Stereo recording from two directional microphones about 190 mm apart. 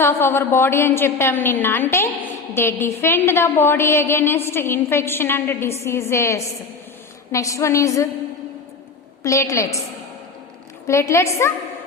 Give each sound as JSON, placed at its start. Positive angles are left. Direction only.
{"t": 0.0, "sound": "a woman's voice", "side_deg": 10}
{"t": 9.2, "sound": "a woman's voice", "side_deg": 15}
{"t": 10.8, "sound": "a woman's voice", "side_deg": 15}